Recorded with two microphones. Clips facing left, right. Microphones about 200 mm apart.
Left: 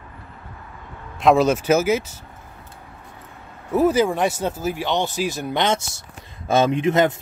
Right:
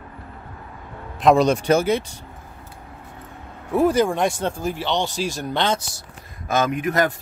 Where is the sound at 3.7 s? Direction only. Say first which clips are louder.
Even; 5° left (ahead or behind); by 7.1 s 25° left (ahead or behind).